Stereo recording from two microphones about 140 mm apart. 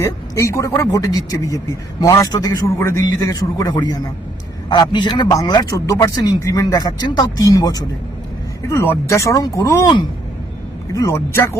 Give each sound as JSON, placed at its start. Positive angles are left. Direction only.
{"t": 0.0, "sound": "a man's voice", "side_deg": 20}
{"t": 10.9, "sound": "a man's voice", "side_deg": 20}